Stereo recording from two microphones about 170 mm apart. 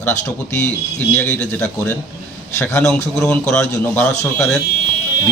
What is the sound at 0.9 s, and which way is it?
A man's voice, 5° left (ahead or behind).